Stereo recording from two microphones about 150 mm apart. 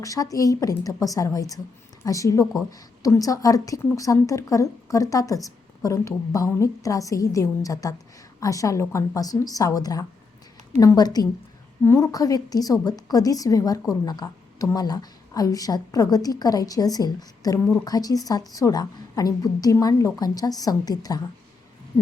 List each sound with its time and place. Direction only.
0.0 s speech: 25° left (ahead or behind)